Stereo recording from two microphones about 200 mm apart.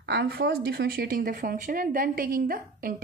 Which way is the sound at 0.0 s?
55° right (ahead or behind).